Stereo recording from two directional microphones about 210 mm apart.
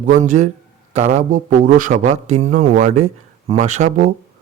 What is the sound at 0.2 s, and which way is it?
Speech, 35° right (ahead or behind).